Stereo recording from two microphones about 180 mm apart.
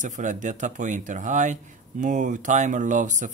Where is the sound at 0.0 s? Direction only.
45° right (ahead or behind).